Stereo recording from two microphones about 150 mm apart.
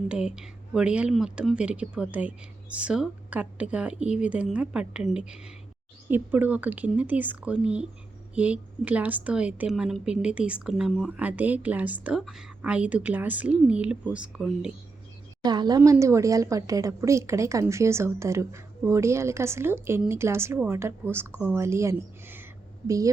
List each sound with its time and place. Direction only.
0.1 s a woman's voice: 5° right (ahead or behind)
15.4 s a woman's voice: 25° right (ahead or behind)